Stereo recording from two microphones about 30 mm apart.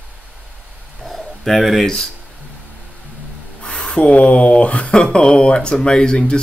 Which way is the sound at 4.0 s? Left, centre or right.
Left.